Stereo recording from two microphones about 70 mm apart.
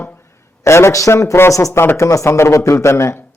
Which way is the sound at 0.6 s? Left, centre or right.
Left.